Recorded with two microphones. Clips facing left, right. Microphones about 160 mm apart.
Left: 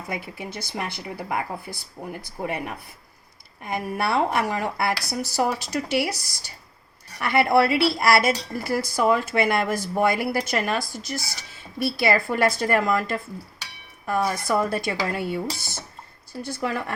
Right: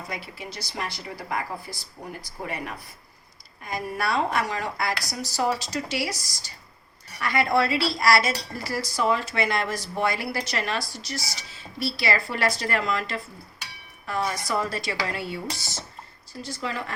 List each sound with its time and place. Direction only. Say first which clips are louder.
0.5 s speech: left 2 dB; 55° left (ahead or behind)
3.7 s speech: left 3 dB; 60° left (ahead or behind)